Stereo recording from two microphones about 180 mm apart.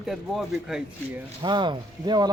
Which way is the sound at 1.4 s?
25° right (ahead or behind).